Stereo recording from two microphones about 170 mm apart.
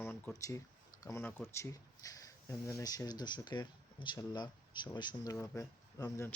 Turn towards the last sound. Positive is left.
turn(degrees=20)  # may be behind; listen again after turning